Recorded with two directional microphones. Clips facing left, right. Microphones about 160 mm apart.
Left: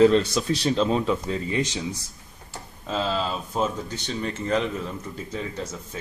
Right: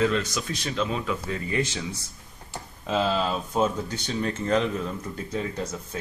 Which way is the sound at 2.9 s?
5° right (ahead or behind).